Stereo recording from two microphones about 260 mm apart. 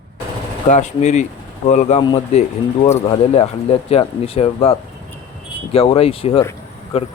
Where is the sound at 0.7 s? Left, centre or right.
Left.